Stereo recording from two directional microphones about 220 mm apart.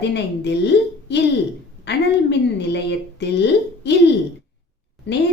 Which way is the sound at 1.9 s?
50° left (ahead or behind).